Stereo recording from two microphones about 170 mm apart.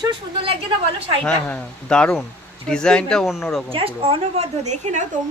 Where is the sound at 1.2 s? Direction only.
5° left (ahead or behind).